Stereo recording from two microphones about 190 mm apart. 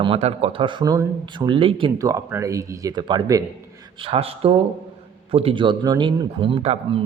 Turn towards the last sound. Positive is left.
turn(degrees=-30)  # may be behind; listen again after turning